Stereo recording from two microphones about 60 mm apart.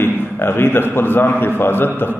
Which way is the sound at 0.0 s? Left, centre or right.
Left.